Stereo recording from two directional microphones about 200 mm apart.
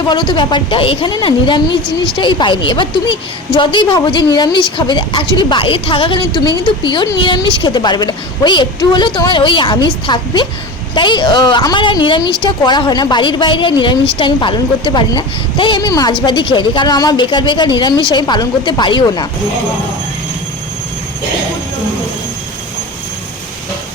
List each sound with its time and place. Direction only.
0.1 s a woman's voice: 25° left (ahead or behind)